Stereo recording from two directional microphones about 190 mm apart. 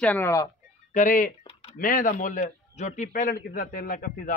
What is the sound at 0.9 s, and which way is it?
Speech, 45° left (ahead or behind).